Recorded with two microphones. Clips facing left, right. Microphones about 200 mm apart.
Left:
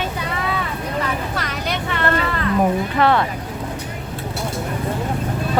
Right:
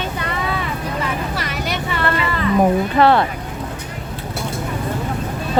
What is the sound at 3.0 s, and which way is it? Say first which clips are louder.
Speech: right 3 dB; 30° right (ahead or behind).